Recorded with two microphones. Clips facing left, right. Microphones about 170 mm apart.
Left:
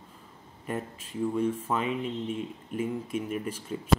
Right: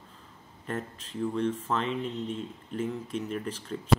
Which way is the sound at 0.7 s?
10° left (ahead or behind).